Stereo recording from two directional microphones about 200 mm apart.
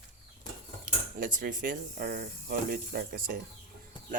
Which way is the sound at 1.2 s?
40° right (ahead or behind).